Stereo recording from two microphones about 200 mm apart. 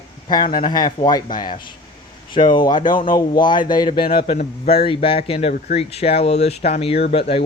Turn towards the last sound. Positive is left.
turn(degrees=30)  # may be behind; listen again after turning